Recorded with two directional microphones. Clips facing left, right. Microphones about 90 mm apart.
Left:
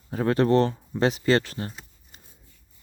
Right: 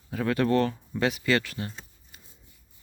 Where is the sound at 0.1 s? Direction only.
30° left (ahead or behind).